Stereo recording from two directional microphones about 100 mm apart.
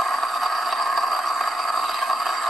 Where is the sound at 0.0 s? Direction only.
Centre (ahead or behind).